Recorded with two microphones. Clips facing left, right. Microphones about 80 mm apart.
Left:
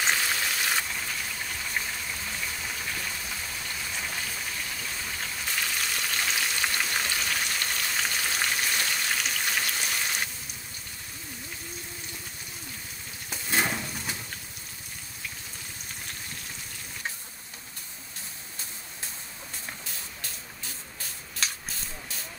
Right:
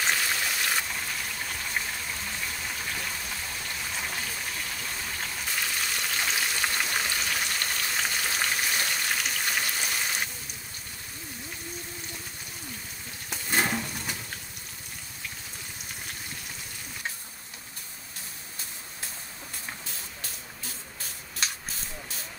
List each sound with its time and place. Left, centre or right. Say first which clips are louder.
0.1 s raindrop: even; centre
4.5 s frying: even; centre
13.3 s a sound: right 1 dB; centre